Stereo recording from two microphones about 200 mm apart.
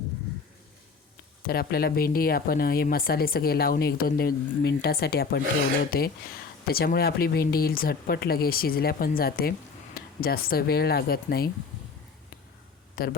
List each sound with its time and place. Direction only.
1.5 s speech: 50° left (ahead or behind)
13.0 s speech: 50° left (ahead or behind)